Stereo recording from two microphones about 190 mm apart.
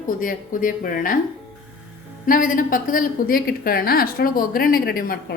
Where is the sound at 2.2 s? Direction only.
45° left (ahead or behind).